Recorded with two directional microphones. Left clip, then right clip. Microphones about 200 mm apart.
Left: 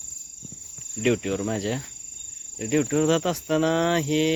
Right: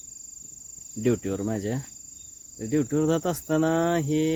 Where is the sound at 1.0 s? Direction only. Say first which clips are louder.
Left 2 dB; 20° right (ahead or behind).